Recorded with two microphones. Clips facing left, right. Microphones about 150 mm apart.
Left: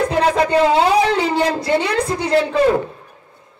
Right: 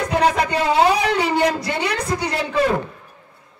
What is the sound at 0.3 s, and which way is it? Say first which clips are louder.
A woman's voice: left 5 dB; 25° left (ahead or behind).